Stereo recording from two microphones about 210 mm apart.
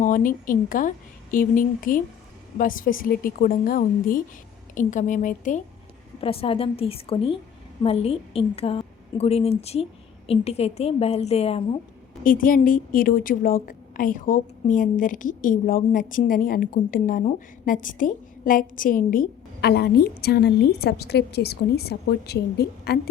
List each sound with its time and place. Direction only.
0.0 s a woman's voice: 40° left (ahead or behind)
6.1 s a woman's voice: 25° left (ahead or behind)
12.2 s a woman's voice: 40° left (ahead or behind)